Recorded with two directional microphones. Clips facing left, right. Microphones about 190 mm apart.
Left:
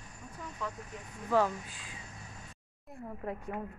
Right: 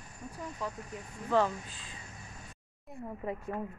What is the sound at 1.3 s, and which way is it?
Speech, 10° left (ahead or behind).